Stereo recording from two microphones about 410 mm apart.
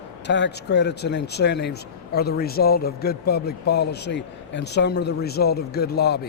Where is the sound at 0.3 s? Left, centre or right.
Left.